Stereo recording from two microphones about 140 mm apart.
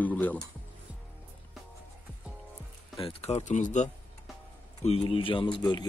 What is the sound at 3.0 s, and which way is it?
Speech, 40° left (ahead or behind).